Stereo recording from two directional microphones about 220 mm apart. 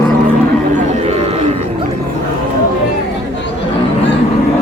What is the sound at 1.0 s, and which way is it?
Bird, 25° right (ahead or behind).